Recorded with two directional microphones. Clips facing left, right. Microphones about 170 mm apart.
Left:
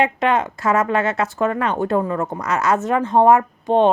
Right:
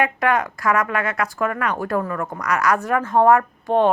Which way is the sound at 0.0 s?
25° left (ahead or behind).